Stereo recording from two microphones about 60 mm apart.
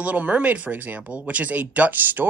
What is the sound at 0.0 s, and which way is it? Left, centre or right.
Speech, right.